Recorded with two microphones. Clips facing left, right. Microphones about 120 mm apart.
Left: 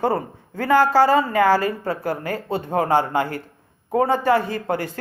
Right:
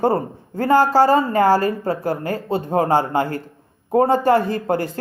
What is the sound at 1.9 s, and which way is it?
Speech, 25° right (ahead or behind).